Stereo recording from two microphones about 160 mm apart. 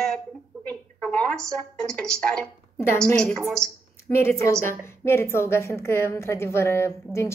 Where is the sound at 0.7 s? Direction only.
5° left (ahead or behind).